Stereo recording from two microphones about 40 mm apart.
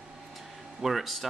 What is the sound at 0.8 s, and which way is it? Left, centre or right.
Speech, centre.